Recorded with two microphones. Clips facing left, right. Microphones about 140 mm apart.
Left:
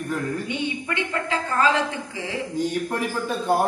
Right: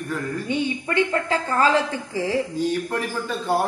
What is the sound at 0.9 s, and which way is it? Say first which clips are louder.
Speech: right 7 dB; 35° right (ahead or behind).